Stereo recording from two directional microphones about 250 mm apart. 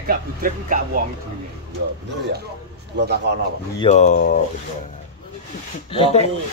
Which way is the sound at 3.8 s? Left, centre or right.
Left.